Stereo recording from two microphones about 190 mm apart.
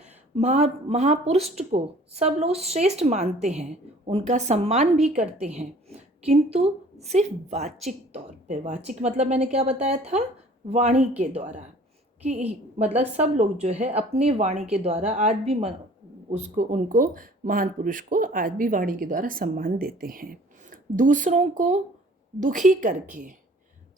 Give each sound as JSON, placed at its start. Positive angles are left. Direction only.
{"t": 0.0, "sound": "a woman's voice", "side_deg": -35}